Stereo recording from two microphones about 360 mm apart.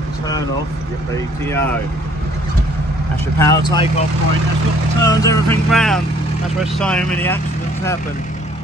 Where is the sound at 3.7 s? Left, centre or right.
Centre.